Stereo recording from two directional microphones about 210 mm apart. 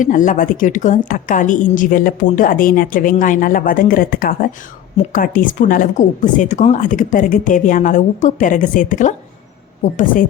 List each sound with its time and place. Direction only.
0.0 s a woman's voice: 40° left (ahead or behind)